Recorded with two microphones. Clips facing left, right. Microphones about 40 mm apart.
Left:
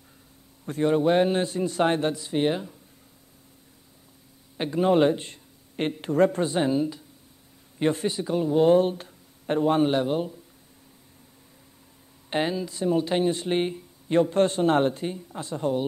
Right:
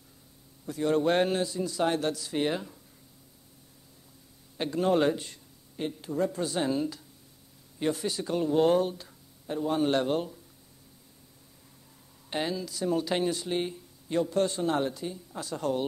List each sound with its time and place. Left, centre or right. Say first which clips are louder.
0.8 s a man's voice: left 4 dB; centre
1.3 s speech: left 4 dB; left; by 2.6 s centre
4.6 s speech: left 5 dB; centre
5.8 s speech: left 8 dB; left
6.4 s speech: left 5 dB; left
6.7 s a man's voice: left 4 dB; centre
7.8 s speech: left 5 dB; left
8.3 s speech: left 4 dB; centre
8.7 s speech: left 6 dB; left
9.8 s speech: left 2 dB; centre
12.3 s speech: left 5 dB; left
15.6 s speech: left 4 dB; left